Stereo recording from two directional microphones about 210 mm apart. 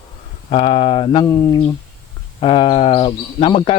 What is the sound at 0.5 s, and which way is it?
Speech, 25° left (ahead or behind).